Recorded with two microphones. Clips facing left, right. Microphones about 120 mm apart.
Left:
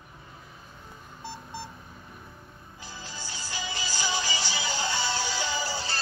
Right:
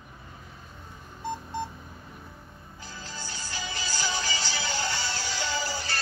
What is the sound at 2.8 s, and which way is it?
Music, 15° left (ahead or behind).